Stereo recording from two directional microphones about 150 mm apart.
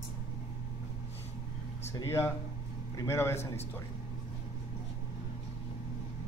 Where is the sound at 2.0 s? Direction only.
20° left (ahead or behind).